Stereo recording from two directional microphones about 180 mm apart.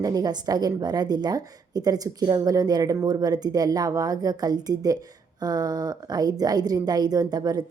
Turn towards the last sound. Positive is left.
turn(degrees=-20)  # may be behind; listen again after turning